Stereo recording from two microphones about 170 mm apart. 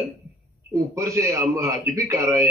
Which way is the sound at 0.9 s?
15° right (ahead or behind).